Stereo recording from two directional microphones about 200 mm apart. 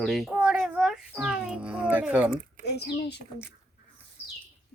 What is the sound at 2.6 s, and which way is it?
Speech, 55° left (ahead or behind).